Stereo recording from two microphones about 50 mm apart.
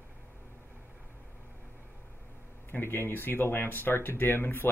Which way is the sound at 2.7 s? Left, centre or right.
Left.